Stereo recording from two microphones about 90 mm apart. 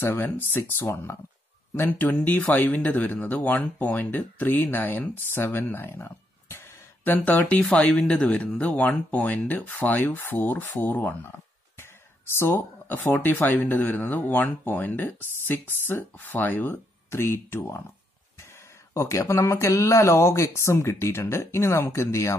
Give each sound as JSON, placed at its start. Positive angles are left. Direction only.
{"t": 0.0, "sound": "speech", "side_deg": 25}
{"t": 12.4, "sound": "speech", "side_deg": 30}
{"t": 18.9, "sound": "speech", "side_deg": 35}